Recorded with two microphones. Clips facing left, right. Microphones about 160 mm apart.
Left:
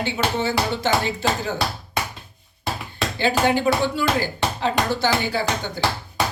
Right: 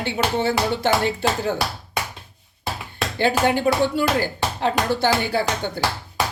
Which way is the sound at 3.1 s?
55° right (ahead or behind).